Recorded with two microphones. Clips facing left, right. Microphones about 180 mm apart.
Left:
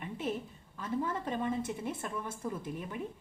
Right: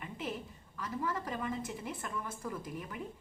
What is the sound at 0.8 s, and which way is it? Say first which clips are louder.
A woman's voice: left 3 dB; 25° left (ahead or behind).